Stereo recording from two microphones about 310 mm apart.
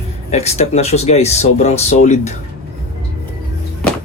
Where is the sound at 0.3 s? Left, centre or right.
Left.